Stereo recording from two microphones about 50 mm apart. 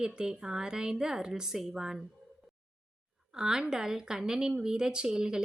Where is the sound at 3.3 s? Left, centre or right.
Centre.